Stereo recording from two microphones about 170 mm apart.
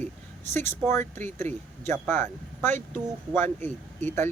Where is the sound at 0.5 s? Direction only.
15° left (ahead or behind).